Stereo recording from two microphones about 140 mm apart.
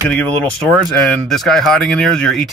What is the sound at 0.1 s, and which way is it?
Speech, 10° left (ahead or behind).